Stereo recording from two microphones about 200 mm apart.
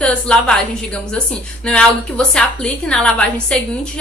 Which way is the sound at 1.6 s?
5° left (ahead or behind).